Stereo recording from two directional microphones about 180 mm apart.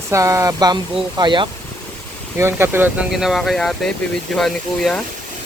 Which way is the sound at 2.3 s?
15° right (ahead or behind).